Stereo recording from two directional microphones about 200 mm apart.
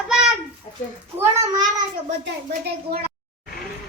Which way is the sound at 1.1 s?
20° right (ahead or behind).